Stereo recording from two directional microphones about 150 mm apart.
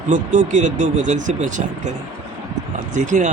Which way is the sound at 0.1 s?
55° right (ahead or behind).